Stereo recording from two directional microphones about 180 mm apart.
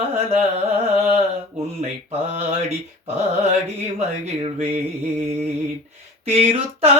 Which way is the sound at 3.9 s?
35° right (ahead or behind).